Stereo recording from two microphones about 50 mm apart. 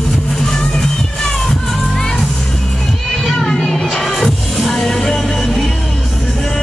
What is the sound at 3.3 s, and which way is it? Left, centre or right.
Music, centre.